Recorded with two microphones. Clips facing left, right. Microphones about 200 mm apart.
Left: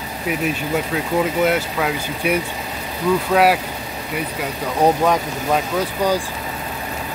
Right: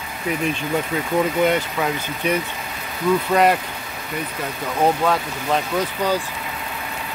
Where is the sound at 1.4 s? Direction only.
5° left (ahead or behind).